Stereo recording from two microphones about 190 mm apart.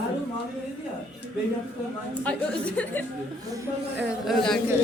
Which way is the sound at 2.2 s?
5° left (ahead or behind).